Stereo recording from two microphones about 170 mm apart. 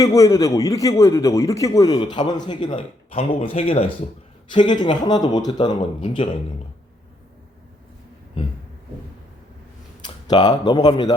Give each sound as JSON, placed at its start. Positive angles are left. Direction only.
{"t": 0.0, "sound": "a man's voice", "side_deg": 20}
{"t": 10.0, "sound": "speech", "side_deg": 25}